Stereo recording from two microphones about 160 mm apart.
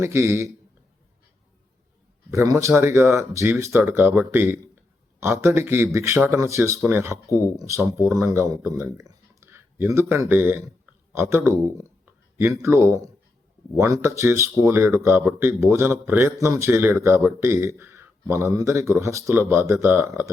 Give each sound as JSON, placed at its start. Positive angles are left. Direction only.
{"t": 0.0, "sound": "speech", "side_deg": -15}
{"t": 2.3, "sound": "speech", "side_deg": -20}